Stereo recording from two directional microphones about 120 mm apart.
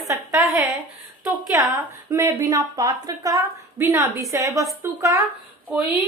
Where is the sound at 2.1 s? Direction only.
25° right (ahead or behind).